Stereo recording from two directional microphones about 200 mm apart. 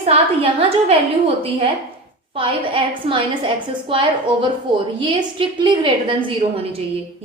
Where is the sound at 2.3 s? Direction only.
25° right (ahead or behind).